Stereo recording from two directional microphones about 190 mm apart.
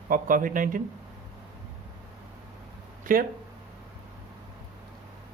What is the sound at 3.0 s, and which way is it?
Speech, 45° right (ahead or behind).